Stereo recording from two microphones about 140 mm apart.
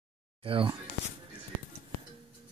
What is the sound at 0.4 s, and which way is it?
Speech, 40° right (ahead or behind).